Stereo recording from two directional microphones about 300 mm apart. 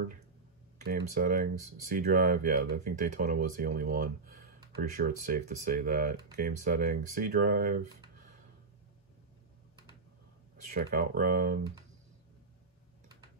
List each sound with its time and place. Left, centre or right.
0.8 s speech: right
10.6 s speech: right